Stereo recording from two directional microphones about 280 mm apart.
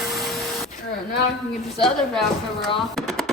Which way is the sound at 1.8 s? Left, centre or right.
Centre.